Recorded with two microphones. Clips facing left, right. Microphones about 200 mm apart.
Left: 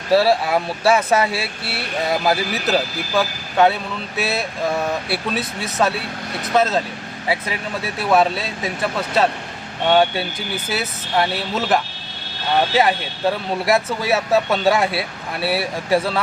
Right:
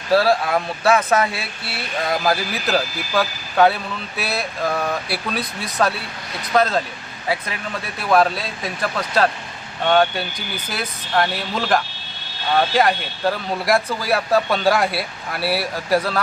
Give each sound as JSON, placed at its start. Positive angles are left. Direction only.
{"t": 0.1, "sound": "speech", "side_deg": 5}
{"t": 7.9, "sound": "speech", "side_deg": 5}